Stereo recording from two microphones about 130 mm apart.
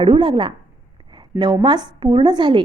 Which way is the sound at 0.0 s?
40° right (ahead or behind).